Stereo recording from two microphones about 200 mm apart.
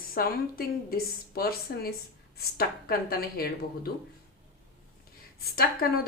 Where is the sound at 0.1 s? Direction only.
50° left (ahead or behind).